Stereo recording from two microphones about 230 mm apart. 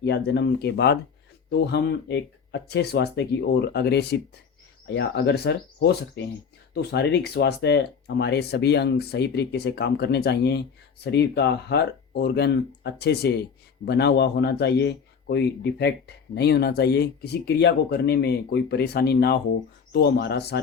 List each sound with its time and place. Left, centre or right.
0.0 s speech: left